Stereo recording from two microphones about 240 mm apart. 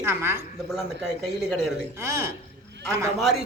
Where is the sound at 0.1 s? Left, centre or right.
Centre.